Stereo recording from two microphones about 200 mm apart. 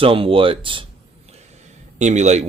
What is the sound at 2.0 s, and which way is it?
Speech, 35° right (ahead or behind).